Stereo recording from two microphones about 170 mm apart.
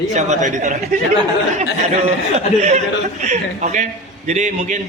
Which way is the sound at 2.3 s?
40° right (ahead or behind).